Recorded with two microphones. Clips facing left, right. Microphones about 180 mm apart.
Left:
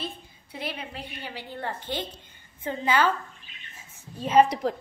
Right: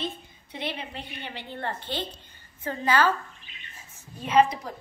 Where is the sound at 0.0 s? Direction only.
5° left (ahead or behind).